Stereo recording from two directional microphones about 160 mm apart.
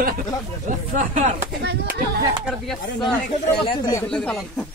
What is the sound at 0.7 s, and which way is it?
Speech, 50° right (ahead or behind).